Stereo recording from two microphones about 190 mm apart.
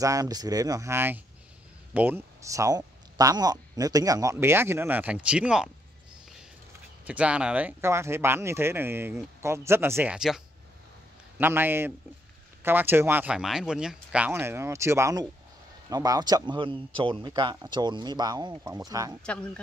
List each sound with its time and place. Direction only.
0.0 s speech: 20° right (ahead or behind)
7.1 s speech: 5° right (ahead or behind)
19.2 s speech: 5° left (ahead or behind)